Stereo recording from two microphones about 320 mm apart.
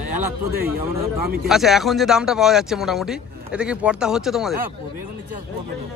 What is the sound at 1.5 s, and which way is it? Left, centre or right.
A man's voice, centre.